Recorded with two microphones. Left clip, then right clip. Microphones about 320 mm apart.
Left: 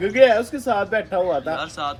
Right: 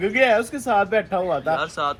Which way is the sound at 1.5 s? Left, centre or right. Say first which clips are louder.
Right 3 dB; centre.